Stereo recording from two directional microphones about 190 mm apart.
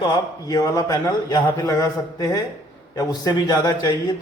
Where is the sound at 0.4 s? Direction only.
20° left (ahead or behind).